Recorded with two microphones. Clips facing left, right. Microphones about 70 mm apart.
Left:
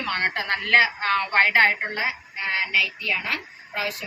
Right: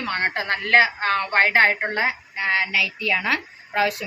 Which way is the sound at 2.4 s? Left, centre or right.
Right.